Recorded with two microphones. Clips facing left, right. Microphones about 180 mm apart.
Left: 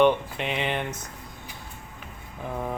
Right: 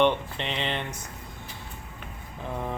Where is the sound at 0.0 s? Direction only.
10° left (ahead or behind).